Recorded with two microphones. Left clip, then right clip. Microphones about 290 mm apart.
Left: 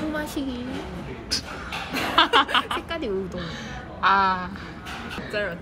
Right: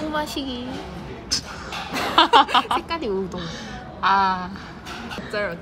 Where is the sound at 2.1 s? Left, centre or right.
Centre.